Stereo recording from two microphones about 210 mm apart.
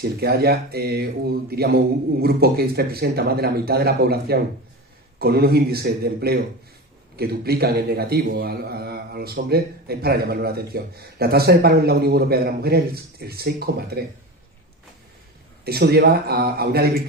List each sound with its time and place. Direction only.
0.0 s a man's voice: 50° right (ahead or behind)
15.6 s a man's voice: 50° right (ahead or behind)